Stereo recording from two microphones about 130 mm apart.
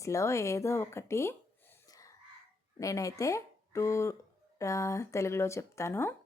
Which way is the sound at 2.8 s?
25° left (ahead or behind).